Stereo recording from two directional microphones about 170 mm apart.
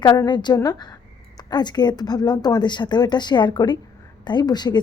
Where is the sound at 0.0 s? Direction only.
25° left (ahead or behind).